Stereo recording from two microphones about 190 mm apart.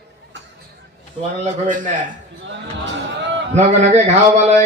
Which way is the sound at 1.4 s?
40° right (ahead or behind).